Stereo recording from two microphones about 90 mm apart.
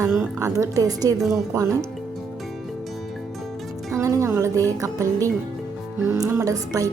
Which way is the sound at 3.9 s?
35° right (ahead or behind).